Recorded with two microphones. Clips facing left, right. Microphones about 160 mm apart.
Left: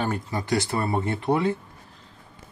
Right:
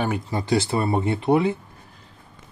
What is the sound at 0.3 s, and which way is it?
Speech, 25° right (ahead or behind).